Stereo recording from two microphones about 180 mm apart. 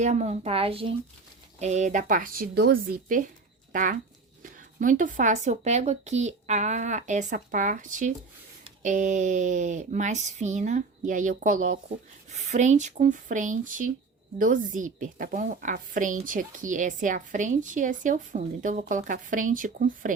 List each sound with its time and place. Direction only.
0.0 s a woman's voice: 40° right (ahead or behind)